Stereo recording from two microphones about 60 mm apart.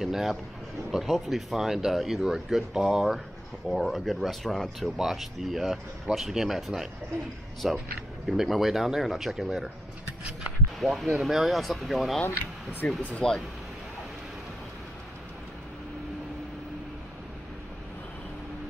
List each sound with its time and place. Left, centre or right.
0.0 s a man's voice: centre
10.8 s speech: centre
12.8 s speech: left
13.2 s speech: centre